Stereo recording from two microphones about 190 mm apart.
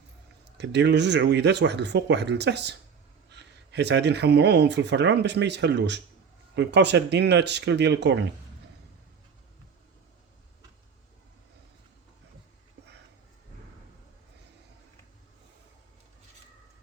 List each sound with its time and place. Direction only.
0.5 s speech: 65° right (ahead or behind)